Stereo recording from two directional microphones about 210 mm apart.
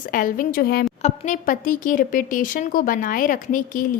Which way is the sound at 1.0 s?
35° left (ahead or behind).